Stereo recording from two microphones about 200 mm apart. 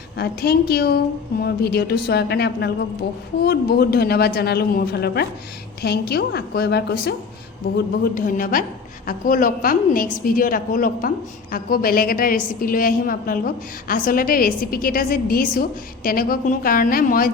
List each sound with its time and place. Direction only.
0.2 s a woman's voice: 55° left (ahead or behind)
8.1 s a woman's voice: 40° left (ahead or behind)